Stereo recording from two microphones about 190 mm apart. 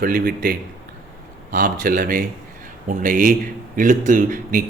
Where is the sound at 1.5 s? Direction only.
45° right (ahead or behind).